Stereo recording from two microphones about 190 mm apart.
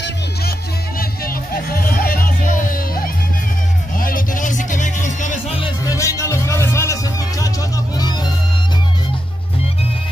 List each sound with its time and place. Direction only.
0.9 s music: 50° left (ahead or behind)
4.0 s music: 45° left (ahead or behind)
5.6 s music: 15° left (ahead or behind)